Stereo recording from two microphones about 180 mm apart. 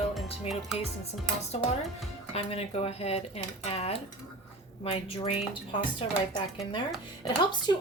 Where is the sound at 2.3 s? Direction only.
35° left (ahead or behind).